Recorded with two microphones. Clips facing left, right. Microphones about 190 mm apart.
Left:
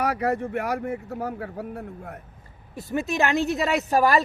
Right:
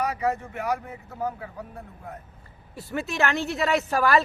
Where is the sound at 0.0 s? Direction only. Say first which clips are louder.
Left 2 dB; 60° left (ahead or behind).